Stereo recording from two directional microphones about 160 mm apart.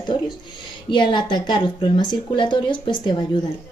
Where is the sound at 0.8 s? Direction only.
30° left (ahead or behind).